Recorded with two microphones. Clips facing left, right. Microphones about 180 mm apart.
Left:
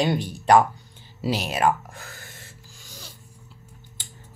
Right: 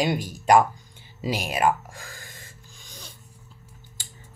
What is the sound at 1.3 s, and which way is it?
Speech, 10° right (ahead or behind).